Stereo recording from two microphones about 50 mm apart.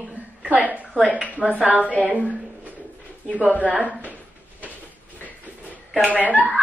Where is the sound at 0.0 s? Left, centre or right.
Right.